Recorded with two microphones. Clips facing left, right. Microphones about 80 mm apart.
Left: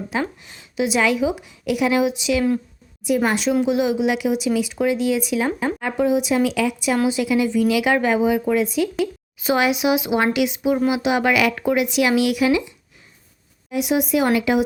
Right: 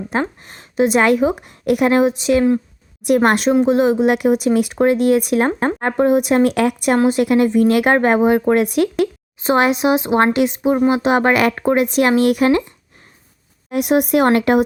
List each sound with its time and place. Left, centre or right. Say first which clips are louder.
0.1 s a woman's voice: right 4 dB; right
3.2 s speech: right 6 dB; right
3.5 s a woman's voice: right 5 dB; right
9.4 s a woman's voice: right 4 dB; right